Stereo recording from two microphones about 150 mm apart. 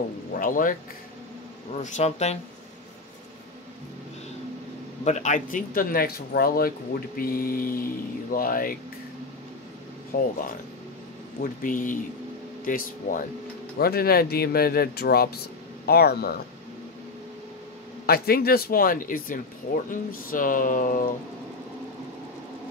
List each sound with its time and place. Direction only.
0.4 s speech: 65° left (ahead or behind)
1.7 s speech: 45° left (ahead or behind)
5.0 s speech: 55° left (ahead or behind); by 8.7 s 70° left (ahead or behind)
10.1 s speech: 85° left
11.4 s speech: 65° left (ahead or behind)
13.7 s speech: 90° left
18.0 s speech: 90° left; by 21.0 s 65° left (ahead or behind)